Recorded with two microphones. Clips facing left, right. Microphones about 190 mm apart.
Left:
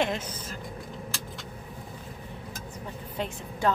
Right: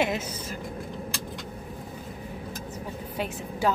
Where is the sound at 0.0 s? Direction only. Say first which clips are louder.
Right 2 dB; 10° right (ahead or behind).